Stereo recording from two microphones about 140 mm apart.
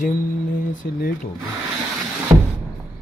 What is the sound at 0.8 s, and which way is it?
Speech, 90° left.